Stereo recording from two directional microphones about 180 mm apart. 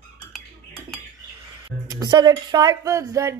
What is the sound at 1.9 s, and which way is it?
Speech, 20° right (ahead or behind).